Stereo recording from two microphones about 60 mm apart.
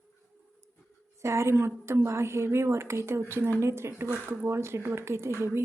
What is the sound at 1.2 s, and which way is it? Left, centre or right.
A woman's voice, right.